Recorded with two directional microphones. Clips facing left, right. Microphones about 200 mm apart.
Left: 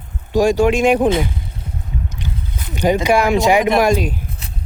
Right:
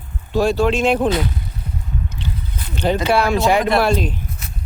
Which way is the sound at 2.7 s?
10° left (ahead or behind).